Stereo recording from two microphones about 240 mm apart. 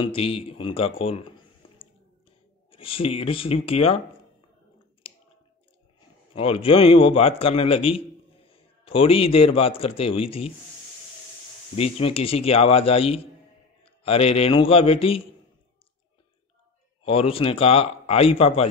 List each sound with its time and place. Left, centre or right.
0.0 s a man's voice: left
2.7 s a man's voice: left
5.1 s clicking: left
6.3 s a man's voice: left
11.7 s a man's voice: left
17.0 s a man's voice: left